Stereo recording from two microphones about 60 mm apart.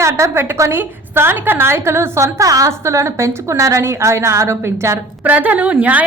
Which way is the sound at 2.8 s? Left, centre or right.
Right.